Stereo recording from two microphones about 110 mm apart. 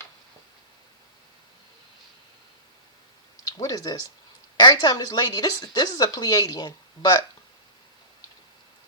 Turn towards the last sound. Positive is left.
turn(degrees=35)  # may be behind; listen again after turning